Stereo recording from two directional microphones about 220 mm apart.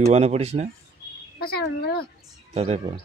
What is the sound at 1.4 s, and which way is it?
Speech, 45° left (ahead or behind).